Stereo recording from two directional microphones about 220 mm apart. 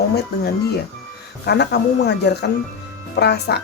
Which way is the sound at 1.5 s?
50° left (ahead or behind).